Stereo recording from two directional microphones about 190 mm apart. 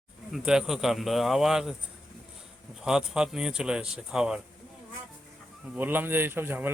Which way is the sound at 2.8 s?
5° right (ahead or behind).